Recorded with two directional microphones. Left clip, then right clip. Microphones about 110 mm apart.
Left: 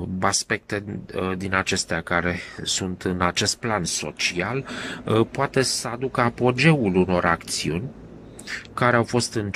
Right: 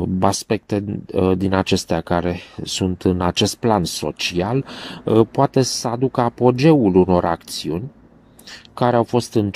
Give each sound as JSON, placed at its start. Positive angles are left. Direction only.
{"t": 0.0, "sound": "speech", "side_deg": -25}